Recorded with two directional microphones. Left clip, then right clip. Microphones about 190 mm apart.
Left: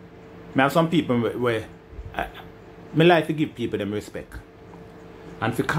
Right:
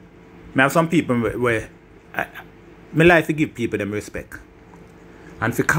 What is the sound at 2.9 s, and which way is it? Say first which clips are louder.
Speech: right 3 dB; 20° right (ahead or behind).